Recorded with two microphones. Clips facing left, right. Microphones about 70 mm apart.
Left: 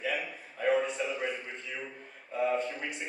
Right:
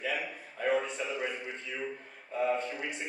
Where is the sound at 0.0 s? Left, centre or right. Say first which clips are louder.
Left 1 dB; centre.